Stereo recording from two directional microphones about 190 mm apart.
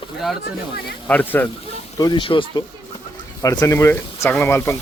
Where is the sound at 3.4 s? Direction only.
20° left (ahead or behind).